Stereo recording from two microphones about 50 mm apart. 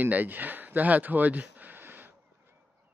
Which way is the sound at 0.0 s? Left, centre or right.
Right.